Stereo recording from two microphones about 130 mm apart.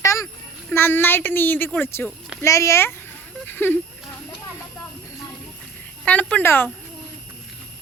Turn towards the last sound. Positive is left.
turn(degrees=15)  # may be behind; listen again after turning